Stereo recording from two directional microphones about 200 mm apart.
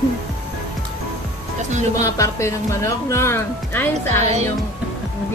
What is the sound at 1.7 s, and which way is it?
Speech, 35° right (ahead or behind).